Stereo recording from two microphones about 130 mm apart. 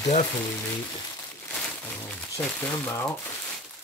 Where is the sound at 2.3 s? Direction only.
15° left (ahead or behind).